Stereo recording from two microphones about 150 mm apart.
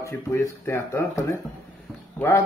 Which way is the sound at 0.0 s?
20° left (ahead or behind).